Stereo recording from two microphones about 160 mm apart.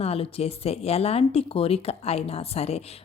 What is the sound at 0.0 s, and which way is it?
Speech, 40° left (ahead or behind).